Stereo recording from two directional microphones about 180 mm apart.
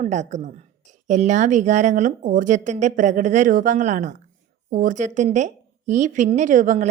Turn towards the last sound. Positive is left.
turn(degrees=-45)  # may be behind; listen again after turning